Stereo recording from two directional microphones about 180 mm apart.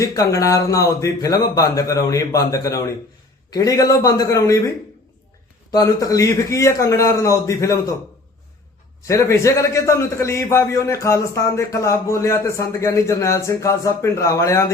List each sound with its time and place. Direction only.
0.0 s a man's voice: 20° left (ahead or behind)
5.7 s a man's voice: 20° left (ahead or behind)
9.0 s a man's voice: 15° left (ahead or behind)